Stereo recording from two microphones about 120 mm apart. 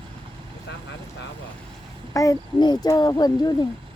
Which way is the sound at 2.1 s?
30° left (ahead or behind).